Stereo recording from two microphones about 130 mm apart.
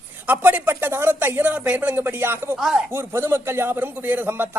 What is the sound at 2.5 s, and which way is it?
Speech, 5° right (ahead or behind).